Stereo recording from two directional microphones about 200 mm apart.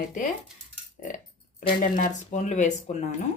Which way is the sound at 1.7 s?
40° left (ahead or behind).